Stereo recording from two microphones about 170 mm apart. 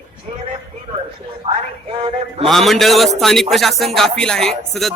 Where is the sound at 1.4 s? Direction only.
30° right (ahead or behind).